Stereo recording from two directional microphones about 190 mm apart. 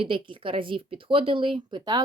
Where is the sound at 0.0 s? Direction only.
25° right (ahead or behind).